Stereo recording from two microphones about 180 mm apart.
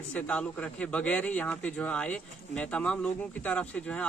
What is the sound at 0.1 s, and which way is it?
A man's voice, 5° left (ahead or behind).